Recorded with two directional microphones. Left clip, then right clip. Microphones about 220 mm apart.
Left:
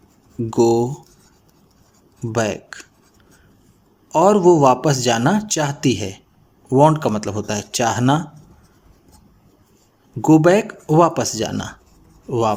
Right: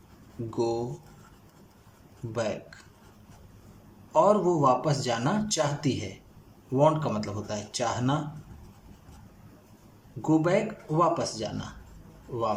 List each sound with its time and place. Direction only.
0.5 s speech: 45° left (ahead or behind)
2.3 s speech: 40° left (ahead or behind)
4.1 s speech: 40° left (ahead or behind)
10.2 s speech: 40° left (ahead or behind)